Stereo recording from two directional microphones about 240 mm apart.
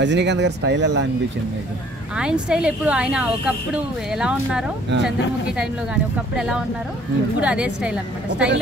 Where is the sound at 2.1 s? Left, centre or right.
Centre.